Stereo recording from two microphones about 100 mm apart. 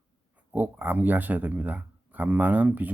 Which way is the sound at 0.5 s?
15° right (ahead or behind).